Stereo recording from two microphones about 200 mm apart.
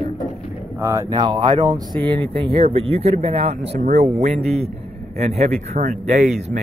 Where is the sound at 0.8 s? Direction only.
15° right (ahead or behind).